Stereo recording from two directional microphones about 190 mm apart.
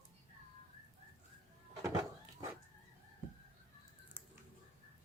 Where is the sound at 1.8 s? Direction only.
20° right (ahead or behind).